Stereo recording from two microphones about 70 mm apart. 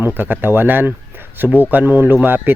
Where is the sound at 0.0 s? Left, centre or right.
Right.